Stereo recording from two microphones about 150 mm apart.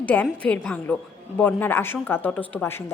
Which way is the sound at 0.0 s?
10° left (ahead or behind).